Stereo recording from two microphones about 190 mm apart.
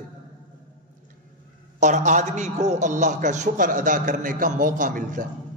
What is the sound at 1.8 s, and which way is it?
A man's voice, 40° right (ahead or behind).